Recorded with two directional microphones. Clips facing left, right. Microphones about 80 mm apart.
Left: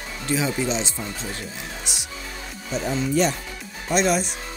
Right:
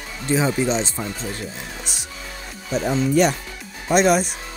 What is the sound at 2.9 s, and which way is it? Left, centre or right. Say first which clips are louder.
Speech: right 4 dB; right.